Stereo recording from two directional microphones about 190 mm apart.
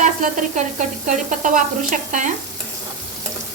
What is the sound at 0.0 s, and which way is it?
Sizzle, 40° right (ahead or behind).